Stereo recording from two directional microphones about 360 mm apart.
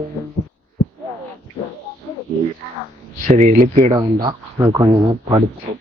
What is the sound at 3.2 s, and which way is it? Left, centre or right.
Speech, right.